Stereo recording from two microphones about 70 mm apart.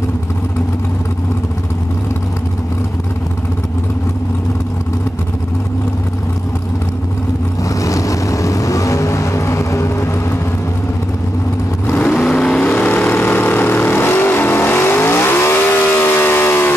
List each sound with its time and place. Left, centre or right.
7.6 s vehicle: left
12.0 s vehicle: centre
12.6 s vehicle: left